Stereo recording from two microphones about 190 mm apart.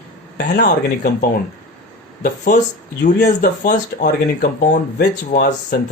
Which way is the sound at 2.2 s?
40° left (ahead or behind).